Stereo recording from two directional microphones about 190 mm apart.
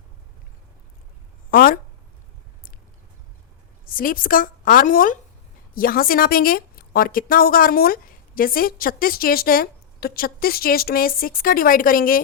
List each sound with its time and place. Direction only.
1.5 s speech: 50° left (ahead or behind)
3.8 s a woman's voice: 50° left (ahead or behind)